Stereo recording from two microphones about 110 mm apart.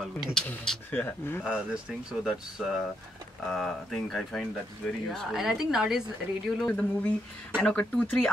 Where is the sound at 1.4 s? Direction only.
5° right (ahead or behind).